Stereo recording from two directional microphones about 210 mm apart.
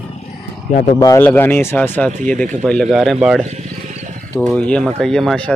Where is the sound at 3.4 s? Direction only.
30° right (ahead or behind).